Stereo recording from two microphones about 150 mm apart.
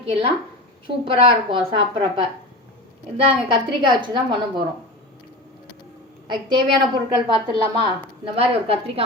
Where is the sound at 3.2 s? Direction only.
35° right (ahead or behind).